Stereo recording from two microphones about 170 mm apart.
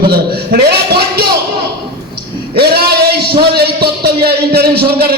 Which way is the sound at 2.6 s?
70° right (ahead or behind).